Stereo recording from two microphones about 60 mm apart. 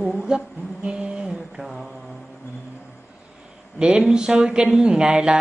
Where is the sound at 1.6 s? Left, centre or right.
Centre.